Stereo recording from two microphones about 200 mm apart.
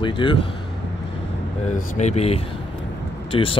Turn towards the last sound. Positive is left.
turn(degrees=25)  # may be behind; listen again after turning